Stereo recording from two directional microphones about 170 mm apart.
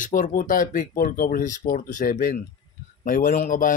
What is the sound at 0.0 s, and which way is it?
Speech, 50° left (ahead or behind).